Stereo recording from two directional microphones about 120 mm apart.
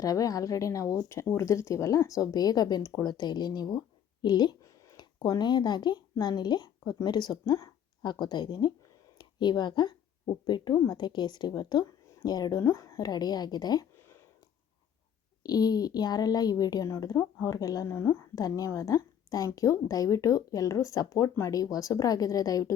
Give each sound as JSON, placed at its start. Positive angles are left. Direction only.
{"t": 0.0, "sound": "a woman's voice", "side_deg": 30}
{"t": 13.9, "sound": "a sound", "side_deg": 20}
{"t": 15.4, "sound": "a woman's voice", "side_deg": 35}